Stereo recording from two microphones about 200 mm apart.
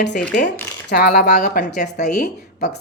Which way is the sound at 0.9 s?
50° left (ahead or behind).